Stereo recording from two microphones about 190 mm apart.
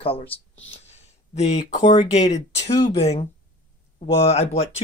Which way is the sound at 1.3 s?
35° left (ahead or behind).